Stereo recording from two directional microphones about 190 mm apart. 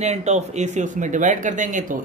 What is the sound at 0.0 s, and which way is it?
Speech, 35° right (ahead or behind).